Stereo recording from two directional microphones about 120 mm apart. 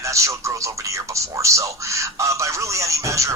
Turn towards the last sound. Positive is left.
turn(degrees=-25)  # may be behind; listen again after turning